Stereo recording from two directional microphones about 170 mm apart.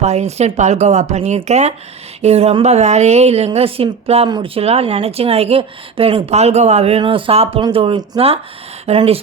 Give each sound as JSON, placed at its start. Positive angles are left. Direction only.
{"t": 0.0, "sound": "a woman's voice", "side_deg": -40}